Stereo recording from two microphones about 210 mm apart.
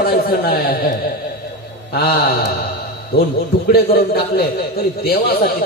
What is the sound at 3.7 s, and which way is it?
A man's voice, 45° left (ahead or behind).